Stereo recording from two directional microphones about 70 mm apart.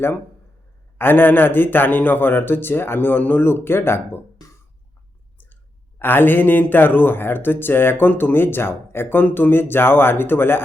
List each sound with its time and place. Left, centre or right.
0.9 s speech: left
4.4 s a sound: left
6.0 s speech: left